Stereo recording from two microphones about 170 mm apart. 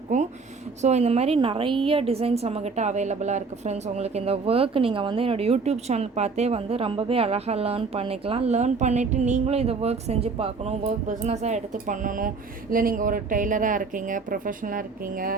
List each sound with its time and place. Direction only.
0.1 s a woman's voice: 45° right (ahead or behind)